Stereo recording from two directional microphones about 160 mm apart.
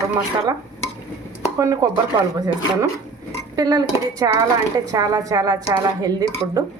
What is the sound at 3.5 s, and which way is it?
A woman's voice, 25° right (ahead or behind).